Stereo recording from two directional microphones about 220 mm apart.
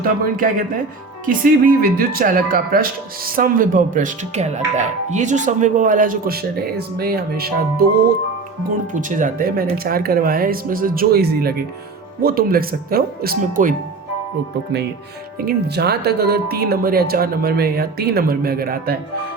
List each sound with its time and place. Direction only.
0.0 s speech: 40° right (ahead or behind)
15.4 s speech: 45° right (ahead or behind)